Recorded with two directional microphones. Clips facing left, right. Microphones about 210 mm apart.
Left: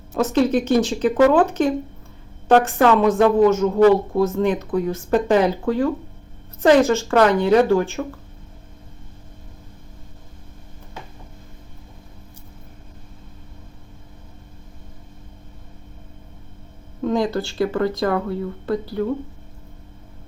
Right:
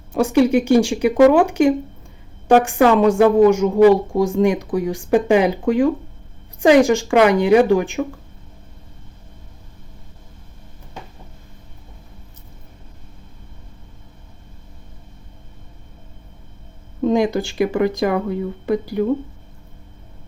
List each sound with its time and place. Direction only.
0.1 s a woman's voice: 10° right (ahead or behind)
17.0 s a woman's voice: 15° right (ahead or behind)